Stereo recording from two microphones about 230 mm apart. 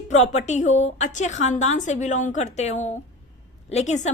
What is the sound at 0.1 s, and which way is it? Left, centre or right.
A woman's voice, left.